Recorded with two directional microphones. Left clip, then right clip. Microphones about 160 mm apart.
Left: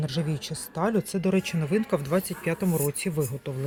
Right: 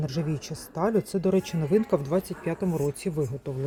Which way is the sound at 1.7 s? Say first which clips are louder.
Right 3 dB; 25° right (ahead or behind).